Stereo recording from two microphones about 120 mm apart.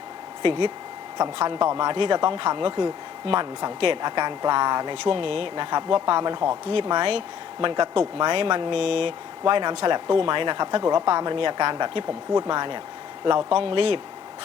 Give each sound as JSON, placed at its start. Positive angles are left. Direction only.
{"t": 0.4, "sound": "speech", "side_deg": -45}
{"t": 5.7, "sound": "speech", "side_deg": -40}
{"t": 9.5, "sound": "speech", "side_deg": -40}